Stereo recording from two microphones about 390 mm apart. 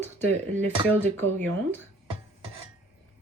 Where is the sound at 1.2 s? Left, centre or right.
Centre.